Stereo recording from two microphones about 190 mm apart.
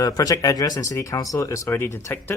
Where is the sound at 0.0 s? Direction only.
20° left (ahead or behind).